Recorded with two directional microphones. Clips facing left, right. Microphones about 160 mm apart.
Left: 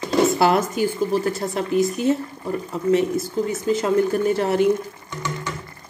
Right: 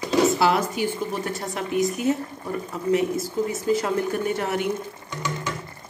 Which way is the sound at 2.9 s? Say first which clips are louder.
Left 3 dB; 25° left (ahead or behind).